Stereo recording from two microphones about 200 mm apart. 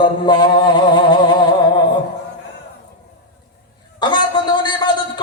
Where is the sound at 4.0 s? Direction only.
20° left (ahead or behind).